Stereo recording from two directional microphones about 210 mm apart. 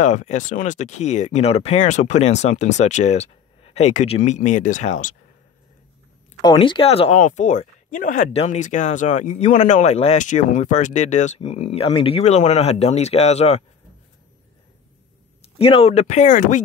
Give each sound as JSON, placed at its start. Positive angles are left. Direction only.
{"t": 0.0, "sound": "speech", "side_deg": 35}
{"t": 6.4, "sound": "speech", "side_deg": 20}
{"t": 15.4, "sound": "speech", "side_deg": 25}